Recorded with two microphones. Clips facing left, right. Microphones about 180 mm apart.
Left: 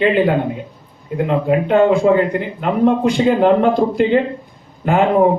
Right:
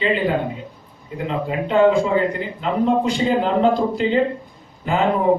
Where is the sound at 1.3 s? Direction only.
55° left (ahead or behind).